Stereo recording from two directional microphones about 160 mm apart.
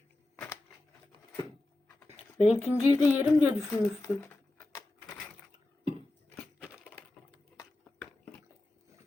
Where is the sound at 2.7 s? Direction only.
20° left (ahead or behind).